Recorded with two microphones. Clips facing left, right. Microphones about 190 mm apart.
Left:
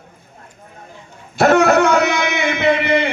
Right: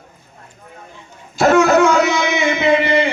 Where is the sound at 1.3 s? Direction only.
60° left (ahead or behind).